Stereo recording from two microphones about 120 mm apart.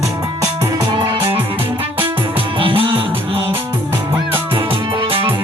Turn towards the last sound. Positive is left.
turn(degrees=-40)  # may be behind; listen again after turning